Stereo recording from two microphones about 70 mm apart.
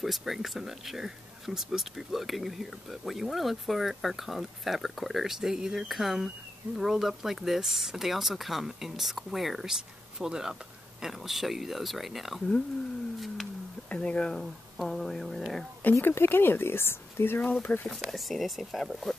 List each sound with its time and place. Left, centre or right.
0.0 s speech: centre
13.8 s speech: centre
15.8 s speech: left
17.4 s speech: left
17.8 s speech: centre